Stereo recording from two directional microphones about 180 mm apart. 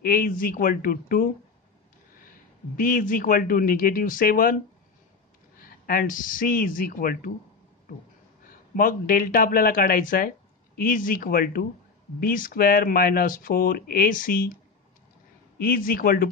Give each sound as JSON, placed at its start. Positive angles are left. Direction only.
{"t": 0.0, "sound": "speech", "side_deg": 50}
{"t": 2.7, "sound": "speech", "side_deg": 50}
{"t": 5.6, "sound": "speech", "side_deg": 55}
{"t": 8.5, "sound": "speech", "side_deg": 50}
{"t": 15.5, "sound": "speech", "side_deg": 55}